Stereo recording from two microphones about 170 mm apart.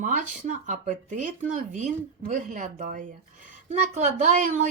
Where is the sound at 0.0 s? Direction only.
50° right (ahead or behind).